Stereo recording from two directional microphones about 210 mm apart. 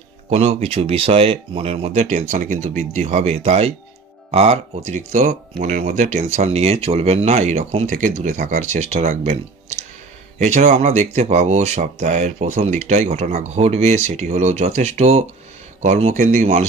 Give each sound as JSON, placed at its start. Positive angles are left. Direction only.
{"t": 0.3, "sound": "speech", "side_deg": -30}